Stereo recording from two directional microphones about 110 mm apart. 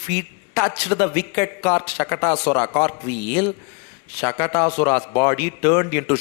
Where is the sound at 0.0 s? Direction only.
25° left (ahead or behind).